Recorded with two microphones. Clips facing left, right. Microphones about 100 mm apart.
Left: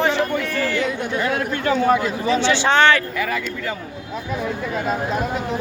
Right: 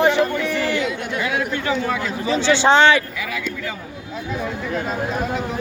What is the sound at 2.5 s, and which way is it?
Speech, 30° right (ahead or behind).